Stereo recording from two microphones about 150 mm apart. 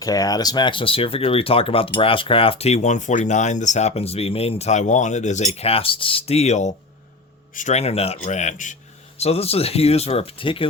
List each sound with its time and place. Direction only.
0.0 s speech: 25° left (ahead or behind); by 8.7 s 55° left (ahead or behind)
9.1 s speech: 45° left (ahead or behind)